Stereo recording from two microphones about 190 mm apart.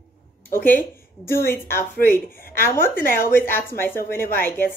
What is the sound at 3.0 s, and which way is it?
Speech, 50° left (ahead or behind).